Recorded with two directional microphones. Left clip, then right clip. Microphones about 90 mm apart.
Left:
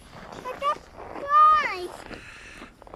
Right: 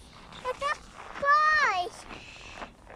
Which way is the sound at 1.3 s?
45° right (ahead or behind).